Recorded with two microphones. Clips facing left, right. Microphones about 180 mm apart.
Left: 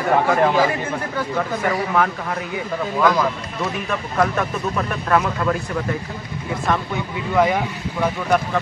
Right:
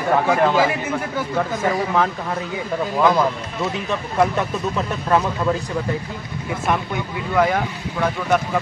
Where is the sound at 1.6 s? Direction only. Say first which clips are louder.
Even; 25° right (ahead or behind).